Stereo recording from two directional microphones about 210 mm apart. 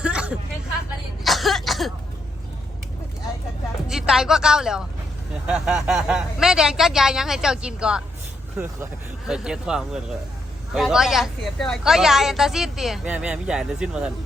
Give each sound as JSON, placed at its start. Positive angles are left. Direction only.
{"t": 0.0, "sound": "a sound", "side_deg": -5}
{"t": 1.2, "sound": "throat clearing", "side_deg": 0}
{"t": 3.8, "sound": "a woman's voice", "side_deg": 0}